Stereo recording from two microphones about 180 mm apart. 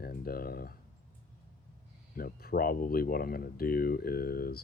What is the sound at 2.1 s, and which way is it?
Speech, 55° left (ahead or behind).